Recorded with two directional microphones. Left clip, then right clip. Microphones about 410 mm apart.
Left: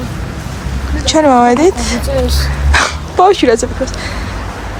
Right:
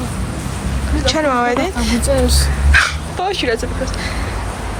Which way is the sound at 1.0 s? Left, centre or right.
Centre.